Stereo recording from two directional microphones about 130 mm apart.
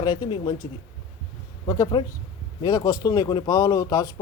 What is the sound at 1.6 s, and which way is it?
A man's voice, 30° left (ahead or behind).